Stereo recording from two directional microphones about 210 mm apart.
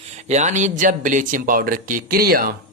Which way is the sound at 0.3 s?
35° right (ahead or behind).